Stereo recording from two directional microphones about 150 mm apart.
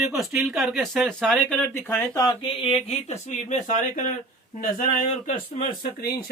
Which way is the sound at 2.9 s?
50° left (ahead or behind).